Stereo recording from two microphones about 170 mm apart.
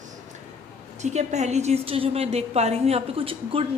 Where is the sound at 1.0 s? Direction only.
45° right (ahead or behind).